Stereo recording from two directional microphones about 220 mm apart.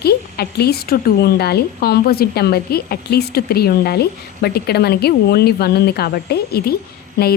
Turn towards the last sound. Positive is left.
turn(degrees=50)  # may be behind; listen again after turning